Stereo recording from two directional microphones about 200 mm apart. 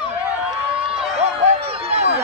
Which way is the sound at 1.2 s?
30° right (ahead or behind).